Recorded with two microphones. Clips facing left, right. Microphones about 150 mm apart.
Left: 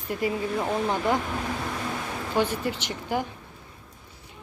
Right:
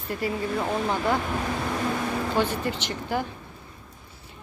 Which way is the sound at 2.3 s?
10° left (ahead or behind).